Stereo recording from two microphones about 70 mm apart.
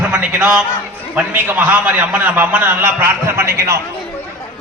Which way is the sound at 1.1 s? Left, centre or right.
Right.